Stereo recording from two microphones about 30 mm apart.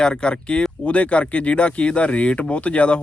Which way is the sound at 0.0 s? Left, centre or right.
Left.